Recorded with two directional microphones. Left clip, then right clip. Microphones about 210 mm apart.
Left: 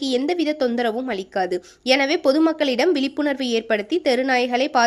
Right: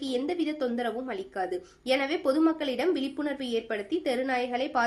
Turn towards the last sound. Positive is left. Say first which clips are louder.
# left 9 dB
turn(degrees=45)  # may be behind; listen again after turning